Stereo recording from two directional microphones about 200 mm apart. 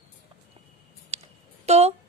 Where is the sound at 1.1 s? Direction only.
30° right (ahead or behind).